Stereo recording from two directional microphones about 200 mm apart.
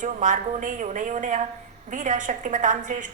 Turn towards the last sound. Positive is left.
turn(degrees=-40)  # may be behind; listen again after turning